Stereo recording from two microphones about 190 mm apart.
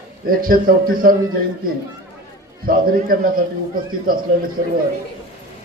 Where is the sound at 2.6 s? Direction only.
50° right (ahead or behind).